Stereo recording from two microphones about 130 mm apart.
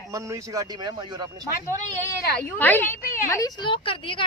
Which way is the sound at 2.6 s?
15° left (ahead or behind).